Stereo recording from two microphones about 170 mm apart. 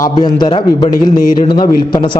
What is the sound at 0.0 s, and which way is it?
A man's voice, 25° left (ahead or behind).